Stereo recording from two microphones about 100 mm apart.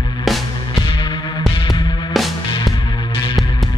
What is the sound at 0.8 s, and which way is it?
Music, 50° left (ahead or behind).